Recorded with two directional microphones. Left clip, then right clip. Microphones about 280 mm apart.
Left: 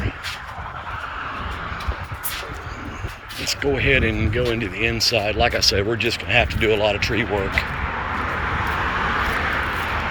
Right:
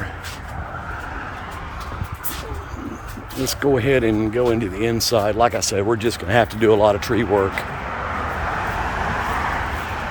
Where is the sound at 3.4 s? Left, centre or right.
Centre.